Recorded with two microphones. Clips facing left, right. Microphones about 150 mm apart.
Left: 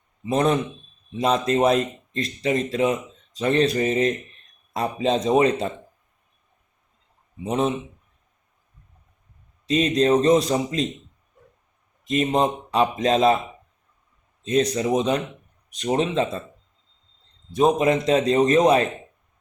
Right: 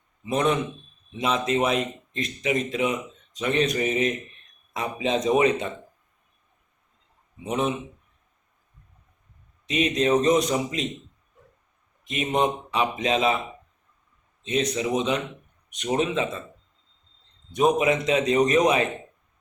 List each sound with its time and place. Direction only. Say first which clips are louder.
0.3 s speech: left 3 dB; 35° left (ahead or behind)
7.4 s speech: left 3 dB; 30° left (ahead or behind)
9.6 s speech: left 3 dB; 35° left (ahead or behind)
12.3 s speech: left 2 dB; 35° left (ahead or behind)
14.4 s speech: left 4 dB; 35° left (ahead or behind)
17.7 s speech: left 3 dB; 35° left (ahead or behind)